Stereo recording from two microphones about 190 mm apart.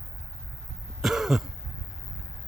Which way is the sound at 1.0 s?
Centre (ahead or behind).